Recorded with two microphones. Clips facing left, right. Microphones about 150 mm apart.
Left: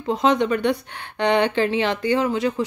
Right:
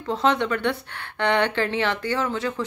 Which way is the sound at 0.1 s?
15° left (ahead or behind).